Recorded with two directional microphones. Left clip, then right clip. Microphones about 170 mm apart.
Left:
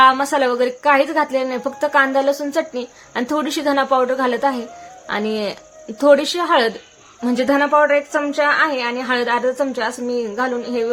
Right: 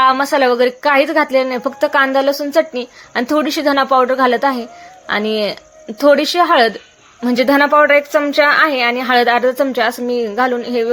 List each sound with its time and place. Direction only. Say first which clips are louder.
0.0 s a woman's voice: right 1 dB; 20° right (ahead or behind)
7.4 s a woman's voice: right 4 dB; 35° right (ahead or behind)